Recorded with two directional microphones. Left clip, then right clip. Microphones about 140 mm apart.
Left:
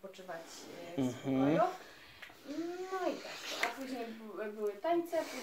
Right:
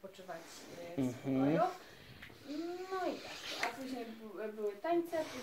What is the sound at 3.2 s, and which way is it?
Speech, centre (ahead or behind).